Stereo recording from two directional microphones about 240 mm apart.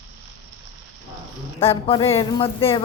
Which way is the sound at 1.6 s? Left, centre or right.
Left.